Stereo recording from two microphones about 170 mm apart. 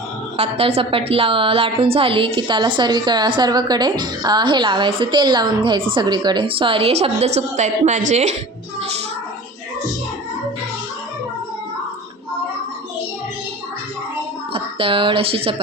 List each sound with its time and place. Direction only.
0.3 s a woman's voice: 35° right (ahead or behind)
14.5 s speech: 30° right (ahead or behind)